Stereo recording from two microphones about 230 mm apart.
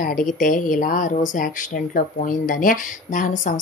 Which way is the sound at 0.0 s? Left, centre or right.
Left.